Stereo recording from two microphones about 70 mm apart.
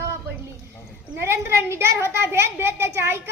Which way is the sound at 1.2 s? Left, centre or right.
Right.